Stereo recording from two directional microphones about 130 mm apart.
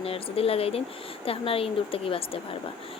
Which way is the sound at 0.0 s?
50° left (ahead or behind).